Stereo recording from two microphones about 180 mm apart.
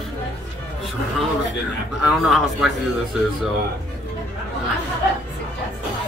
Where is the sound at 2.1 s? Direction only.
Centre (ahead or behind).